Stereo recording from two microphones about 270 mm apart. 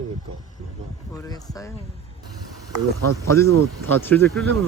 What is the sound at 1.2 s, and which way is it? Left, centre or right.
Speech, centre.